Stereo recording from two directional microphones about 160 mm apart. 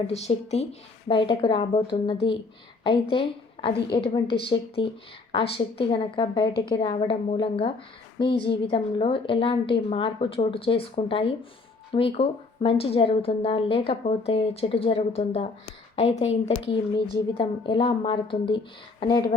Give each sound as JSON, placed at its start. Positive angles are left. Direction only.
{"t": 0.1, "sound": "speech", "side_deg": 40}
{"t": 17.3, "sound": "speech", "side_deg": 30}